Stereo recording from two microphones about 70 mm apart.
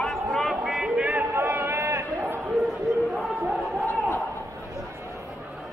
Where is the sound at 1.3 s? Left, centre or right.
Right.